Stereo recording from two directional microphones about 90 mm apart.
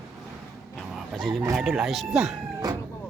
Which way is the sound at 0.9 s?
Centre (ahead or behind).